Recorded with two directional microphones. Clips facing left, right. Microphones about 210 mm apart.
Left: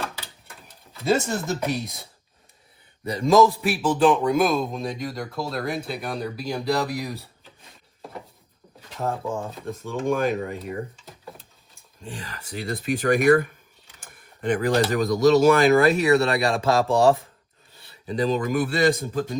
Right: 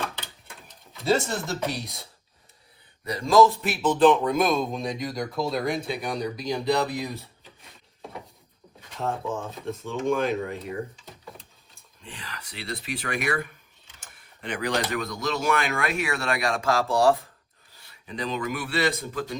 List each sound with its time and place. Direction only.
1.7 s speech: centre (ahead or behind)
3.1 s a man's voice: 20° left (ahead or behind)
3.4 s speech: 5° left (ahead or behind)
9.0 s speech: centre (ahead or behind)
10.0 s tick-tock: centre (ahead or behind)
12.0 s speech: 45° left (ahead or behind)